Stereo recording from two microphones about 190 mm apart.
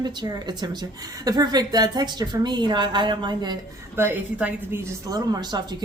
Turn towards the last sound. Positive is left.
turn(degrees=-20)  # may be behind; listen again after turning